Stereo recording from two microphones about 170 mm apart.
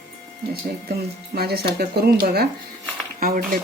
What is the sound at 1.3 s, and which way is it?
Speech, 70° right (ahead or behind).